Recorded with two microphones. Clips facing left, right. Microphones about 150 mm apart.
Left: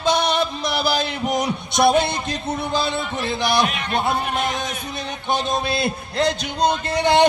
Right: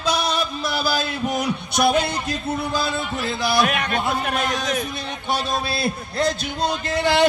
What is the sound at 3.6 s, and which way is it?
Speech, 55° right (ahead or behind).